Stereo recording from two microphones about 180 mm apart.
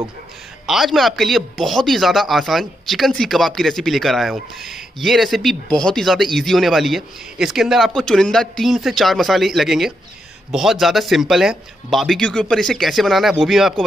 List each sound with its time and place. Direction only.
0.7 s a man's voice: centre (ahead or behind)